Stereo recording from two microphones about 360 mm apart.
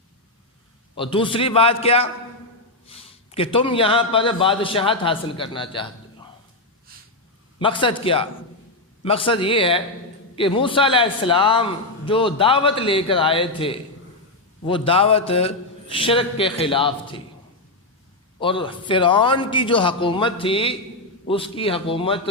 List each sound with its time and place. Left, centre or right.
0.9 s a man's voice: centre
7.6 s a man's voice: centre
18.3 s a man's voice: centre